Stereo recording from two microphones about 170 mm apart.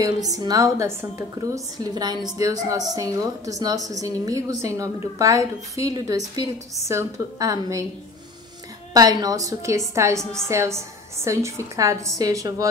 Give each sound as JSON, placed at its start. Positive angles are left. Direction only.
{"t": 0.0, "sound": "a woman's voice", "side_deg": -20}
{"t": 8.9, "sound": "a woman's voice", "side_deg": -20}